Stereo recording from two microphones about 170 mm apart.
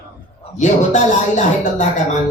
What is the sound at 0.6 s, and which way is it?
Speech, 45° left (ahead or behind).